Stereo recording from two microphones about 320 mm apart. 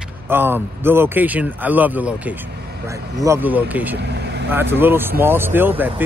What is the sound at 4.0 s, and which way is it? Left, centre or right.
Vehicle, right.